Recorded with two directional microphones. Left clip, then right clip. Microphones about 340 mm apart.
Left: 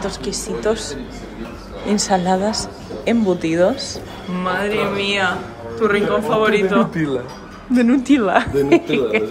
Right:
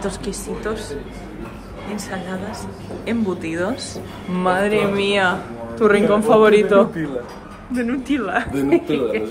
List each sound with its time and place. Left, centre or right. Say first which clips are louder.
0.0 s a woman's voice: left 2 dB; centre
2.0 s a woman's voice: left 13 dB; centre
7.7 s a woman's voice: left 7 dB; centre